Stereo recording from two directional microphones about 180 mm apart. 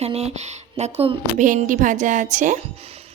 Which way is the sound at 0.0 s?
35° right (ahead or behind).